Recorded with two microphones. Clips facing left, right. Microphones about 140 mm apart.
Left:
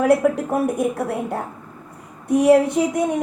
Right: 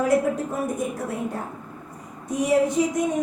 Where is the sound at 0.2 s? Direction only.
65° left (ahead or behind).